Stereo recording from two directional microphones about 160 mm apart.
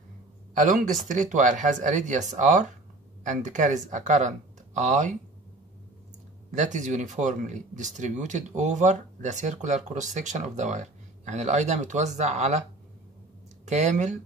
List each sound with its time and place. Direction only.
0.6 s speech: 55° right (ahead or behind)
6.5 s speech: 50° right (ahead or behind)
13.7 s speech: 45° right (ahead or behind)